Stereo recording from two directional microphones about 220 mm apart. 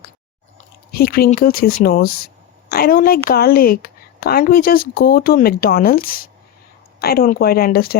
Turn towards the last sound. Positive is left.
turn(degrees=45)  # may be behind; listen again after turning